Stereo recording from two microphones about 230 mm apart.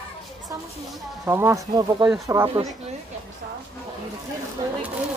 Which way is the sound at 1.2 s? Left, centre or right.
Centre.